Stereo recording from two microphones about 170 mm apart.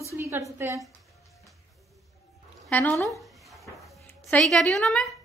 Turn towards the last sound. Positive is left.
turn(degrees=0)  # may be behind; listen again after turning